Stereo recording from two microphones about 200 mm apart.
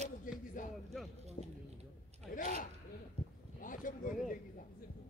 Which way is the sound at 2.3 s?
45° left (ahead or behind).